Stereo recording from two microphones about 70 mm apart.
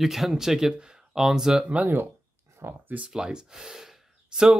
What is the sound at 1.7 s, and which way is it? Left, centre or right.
Speech, right.